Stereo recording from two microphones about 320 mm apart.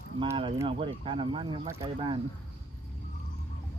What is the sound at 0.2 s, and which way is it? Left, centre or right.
Speech, centre.